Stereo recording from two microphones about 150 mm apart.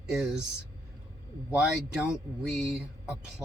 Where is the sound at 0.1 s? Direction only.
5° right (ahead or behind).